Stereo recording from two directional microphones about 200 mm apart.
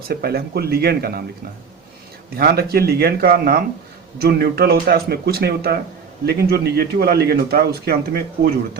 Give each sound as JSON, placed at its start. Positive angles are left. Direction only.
{"t": 0.1, "sound": "a man's voice", "side_deg": -50}
{"t": 2.3, "sound": "a man's voice", "side_deg": -50}